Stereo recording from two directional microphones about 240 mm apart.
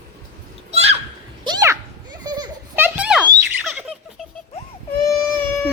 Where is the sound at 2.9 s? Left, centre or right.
Centre.